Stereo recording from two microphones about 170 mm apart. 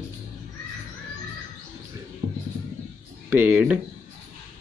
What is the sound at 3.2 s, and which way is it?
Speech, 10° right (ahead or behind).